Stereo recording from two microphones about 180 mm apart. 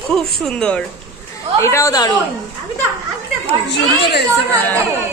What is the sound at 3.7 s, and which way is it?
Speech, 70° left (ahead or behind).